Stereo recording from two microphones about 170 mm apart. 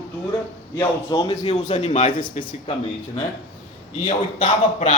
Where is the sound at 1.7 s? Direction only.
40° left (ahead or behind).